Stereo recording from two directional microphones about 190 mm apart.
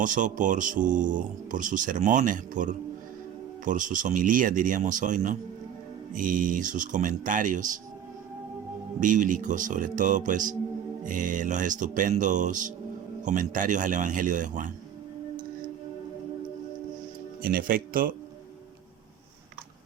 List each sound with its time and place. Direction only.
0.0 s speech: 45° right (ahead or behind)
9.0 s speech: 40° right (ahead or behind)
17.4 s speech: 50° right (ahead or behind)